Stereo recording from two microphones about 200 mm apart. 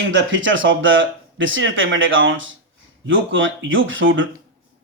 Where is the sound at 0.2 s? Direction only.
70° right (ahead or behind).